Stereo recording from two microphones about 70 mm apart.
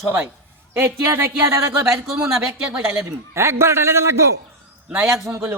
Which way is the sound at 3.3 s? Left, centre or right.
Right.